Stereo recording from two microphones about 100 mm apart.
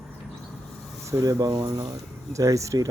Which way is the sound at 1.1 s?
35° right (ahead or behind).